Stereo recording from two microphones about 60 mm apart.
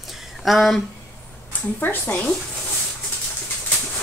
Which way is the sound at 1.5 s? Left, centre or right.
Left.